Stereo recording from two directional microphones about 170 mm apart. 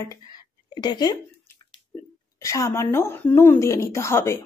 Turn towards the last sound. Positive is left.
turn(degrees=15)  # may be behind; listen again after turning